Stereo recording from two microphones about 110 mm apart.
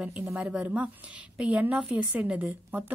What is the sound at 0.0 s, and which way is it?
A woman's voice, 10° right (ahead or behind).